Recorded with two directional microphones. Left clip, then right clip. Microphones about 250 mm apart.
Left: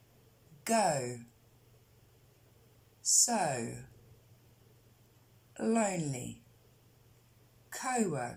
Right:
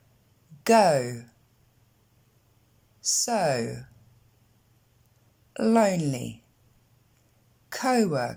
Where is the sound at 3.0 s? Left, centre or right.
Right.